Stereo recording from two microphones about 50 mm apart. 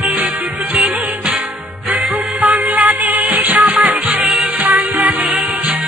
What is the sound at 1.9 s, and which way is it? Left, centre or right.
Music, centre.